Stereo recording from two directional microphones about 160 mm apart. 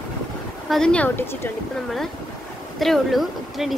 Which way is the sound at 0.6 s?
5° left (ahead or behind).